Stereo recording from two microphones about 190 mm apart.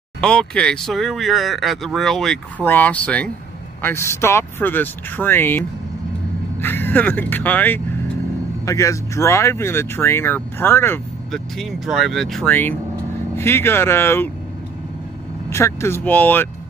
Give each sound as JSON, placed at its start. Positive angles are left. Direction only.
{"t": 0.2, "sound": "speech", "side_deg": 5}
{"t": 6.6, "sound": "speech", "side_deg": 10}
{"t": 11.3, "sound": "speech", "side_deg": 0}
{"t": 15.5, "sound": "speech", "side_deg": 15}